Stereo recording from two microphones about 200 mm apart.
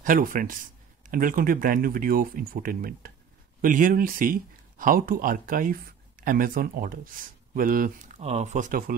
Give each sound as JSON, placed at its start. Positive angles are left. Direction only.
{"t": 0.0, "sound": "speech", "side_deg": -45}